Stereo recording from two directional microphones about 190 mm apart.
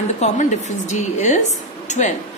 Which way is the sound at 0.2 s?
40° left (ahead or behind).